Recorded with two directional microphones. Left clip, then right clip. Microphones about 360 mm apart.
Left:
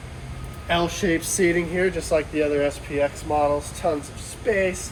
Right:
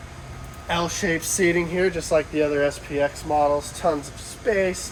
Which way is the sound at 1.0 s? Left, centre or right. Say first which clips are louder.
Right 1 dB; right.